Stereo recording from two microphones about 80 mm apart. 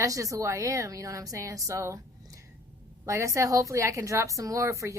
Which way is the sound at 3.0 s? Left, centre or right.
Right.